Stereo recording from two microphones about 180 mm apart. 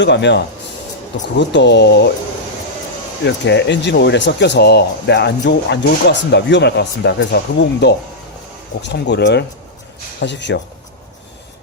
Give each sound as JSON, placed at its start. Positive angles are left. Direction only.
{"t": 0.0, "sound": "speech", "side_deg": 75}
{"t": 3.2, "sound": "speech", "side_deg": 75}